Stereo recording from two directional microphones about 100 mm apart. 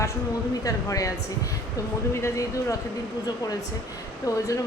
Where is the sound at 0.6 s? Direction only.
35° left (ahead or behind).